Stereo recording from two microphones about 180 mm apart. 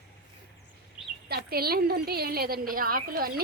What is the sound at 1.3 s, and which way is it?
A woman's voice, 60° right (ahead or behind).